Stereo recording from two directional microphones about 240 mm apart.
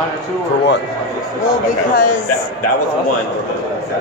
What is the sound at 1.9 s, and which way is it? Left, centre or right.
Speech, left.